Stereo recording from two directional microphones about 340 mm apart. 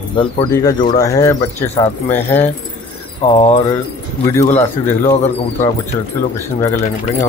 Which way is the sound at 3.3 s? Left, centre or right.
Centre.